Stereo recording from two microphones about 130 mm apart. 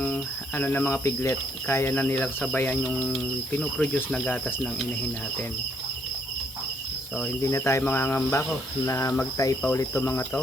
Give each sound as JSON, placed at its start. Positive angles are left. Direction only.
{"t": 0.0, "sound": "speech", "side_deg": 10}
{"t": 7.4, "sound": "speech", "side_deg": 20}